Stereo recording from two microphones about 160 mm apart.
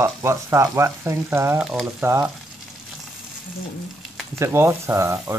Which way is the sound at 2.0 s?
15° right (ahead or behind).